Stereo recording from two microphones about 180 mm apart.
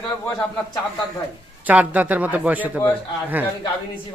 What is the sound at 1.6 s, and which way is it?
A man's voice, 10° right (ahead or behind).